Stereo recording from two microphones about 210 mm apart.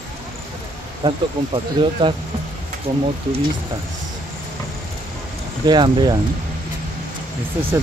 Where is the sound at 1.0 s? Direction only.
25° right (ahead or behind).